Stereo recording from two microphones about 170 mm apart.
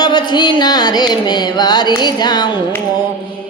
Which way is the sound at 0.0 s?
25° left (ahead or behind).